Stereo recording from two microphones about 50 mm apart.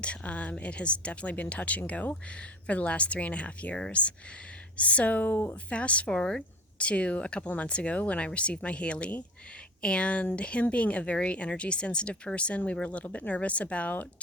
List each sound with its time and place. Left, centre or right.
0.0 s speech: left
6.1 s speech: centre
6.7 s speech: left